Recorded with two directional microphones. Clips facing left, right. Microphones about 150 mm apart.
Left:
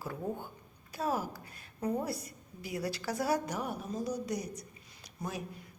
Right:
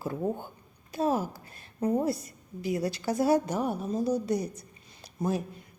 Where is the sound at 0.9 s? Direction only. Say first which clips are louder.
Right 6 dB; 25° right (ahead or behind).